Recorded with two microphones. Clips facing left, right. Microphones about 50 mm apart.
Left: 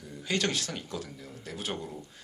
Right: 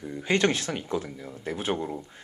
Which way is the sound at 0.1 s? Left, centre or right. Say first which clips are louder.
Right 6 dB; right.